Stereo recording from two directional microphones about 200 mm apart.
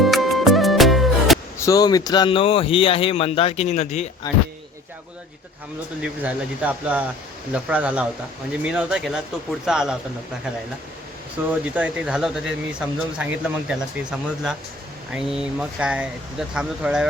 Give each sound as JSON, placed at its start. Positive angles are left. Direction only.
{"t": 0.0, "sound": "music", "side_deg": 0}
{"t": 1.5, "sound": "speech", "side_deg": 15}
{"t": 6.0, "sound": "speech", "side_deg": -5}
{"t": 11.6, "sound": "speech", "side_deg": -5}